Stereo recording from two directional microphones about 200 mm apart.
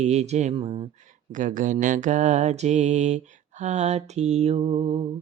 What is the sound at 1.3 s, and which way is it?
Mantra, 40° right (ahead or behind).